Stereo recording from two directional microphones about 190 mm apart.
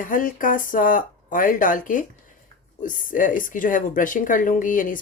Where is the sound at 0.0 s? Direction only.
45° left (ahead or behind).